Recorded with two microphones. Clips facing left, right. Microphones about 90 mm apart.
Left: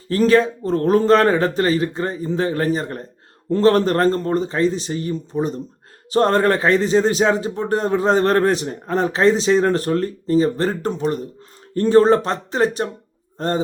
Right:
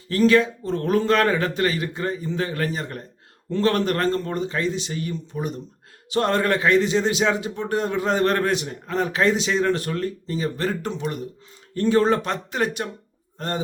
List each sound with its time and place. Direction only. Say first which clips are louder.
0.1 s speech: left 3 dB; 35° left (ahead or behind)